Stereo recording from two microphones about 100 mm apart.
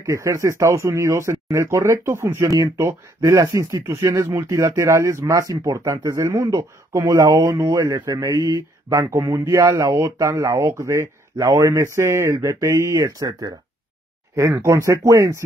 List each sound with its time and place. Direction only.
0.0 s speech: 30° right (ahead or behind)
8.0 s mantra: 45° right (ahead or behind)
8.3 s speech: 30° right (ahead or behind)
14.6 s speech: 30° right (ahead or behind)